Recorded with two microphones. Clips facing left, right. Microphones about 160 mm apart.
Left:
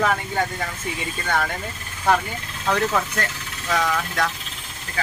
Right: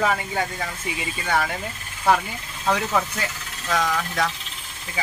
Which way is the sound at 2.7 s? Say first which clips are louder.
Left 2 dB; centre (ahead or behind).